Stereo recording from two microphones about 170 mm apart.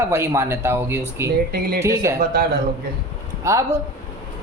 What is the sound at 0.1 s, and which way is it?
Speech, 15° right (ahead or behind).